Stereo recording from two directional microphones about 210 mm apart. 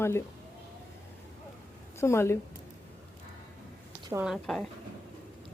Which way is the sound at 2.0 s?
10° left (ahead or behind).